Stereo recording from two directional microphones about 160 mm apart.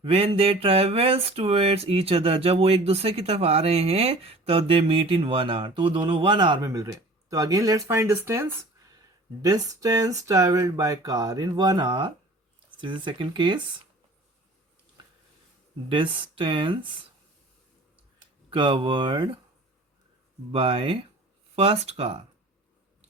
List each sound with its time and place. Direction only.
0.0 s speech: 35° right (ahead or behind)
15.9 s speech: 30° right (ahead or behind)
18.5 s speech: 30° right (ahead or behind)
20.5 s speech: 35° right (ahead or behind)